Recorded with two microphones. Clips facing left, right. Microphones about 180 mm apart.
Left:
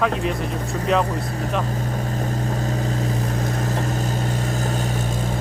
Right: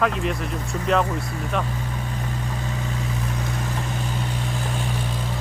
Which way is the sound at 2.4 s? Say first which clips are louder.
Left 5 dB; 40° left (ahead or behind).